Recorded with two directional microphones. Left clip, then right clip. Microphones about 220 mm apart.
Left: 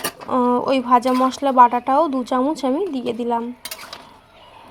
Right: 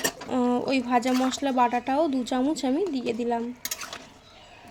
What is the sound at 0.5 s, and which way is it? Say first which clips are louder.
A woman's voice: left 9 dB; 10° left (ahead or behind).